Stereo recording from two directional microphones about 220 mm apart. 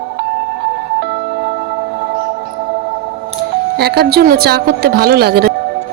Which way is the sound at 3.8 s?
45° right (ahead or behind).